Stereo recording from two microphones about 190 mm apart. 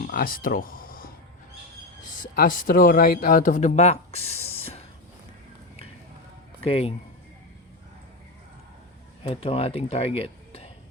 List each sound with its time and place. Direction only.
0.0 s a sound: 50° left (ahead or behind)
2.1 s speech: 45° left (ahead or behind)
6.7 s speech: 30° left (ahead or behind)
9.2 s speech: 30° left (ahead or behind)